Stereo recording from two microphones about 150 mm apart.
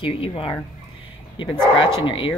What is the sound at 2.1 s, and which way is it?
Speech, 35° left (ahead or behind).